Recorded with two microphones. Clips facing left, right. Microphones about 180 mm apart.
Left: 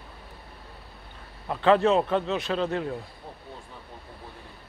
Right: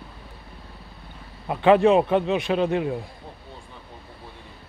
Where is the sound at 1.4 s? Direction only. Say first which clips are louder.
Right 4 dB; 15° right (ahead or behind).